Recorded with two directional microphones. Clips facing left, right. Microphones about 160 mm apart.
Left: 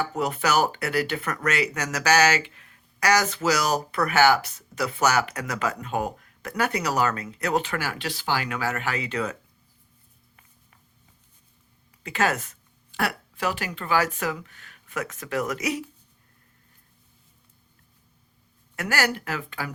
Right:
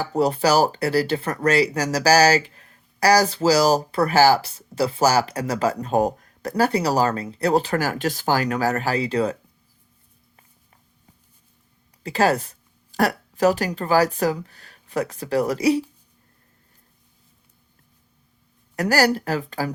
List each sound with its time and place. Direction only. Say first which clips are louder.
0.0 s speech: right 6 dB; 35° right (ahead or behind)
12.0 s speech: right 6 dB; 35° right (ahead or behind)
18.8 s speech: right 7 dB; 35° right (ahead or behind)